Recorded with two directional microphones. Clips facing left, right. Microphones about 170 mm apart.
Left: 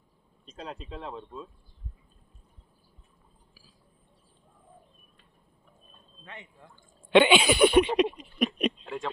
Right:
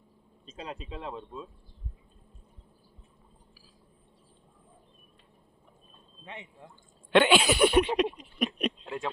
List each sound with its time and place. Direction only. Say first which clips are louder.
0.4 s speech: even; 5° right (ahead or behind)
6.2 s speech: right 2 dB; 25° right (ahead or behind)
7.1 s speech: left 2 dB; centre (ahead or behind)
8.5 s a sound: left 2 dB; centre (ahead or behind)